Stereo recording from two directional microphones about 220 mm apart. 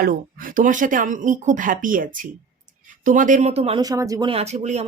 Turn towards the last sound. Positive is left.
turn(degrees=-30)  # may be behind; listen again after turning